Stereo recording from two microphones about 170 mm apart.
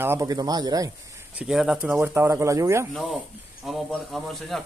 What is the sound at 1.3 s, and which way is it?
Speech, 5° right (ahead or behind).